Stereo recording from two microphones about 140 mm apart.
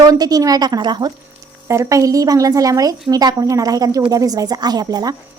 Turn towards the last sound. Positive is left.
turn(degrees=-30)  # may be behind; listen again after turning